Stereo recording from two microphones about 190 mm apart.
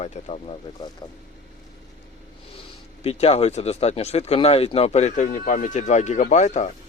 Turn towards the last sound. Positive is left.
turn(degrees=40)  # may be behind; listen again after turning